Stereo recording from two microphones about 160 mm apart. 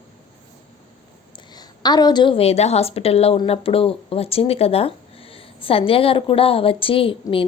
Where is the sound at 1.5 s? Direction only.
25° left (ahead or behind).